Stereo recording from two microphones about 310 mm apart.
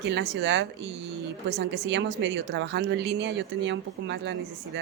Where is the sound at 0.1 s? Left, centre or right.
Right.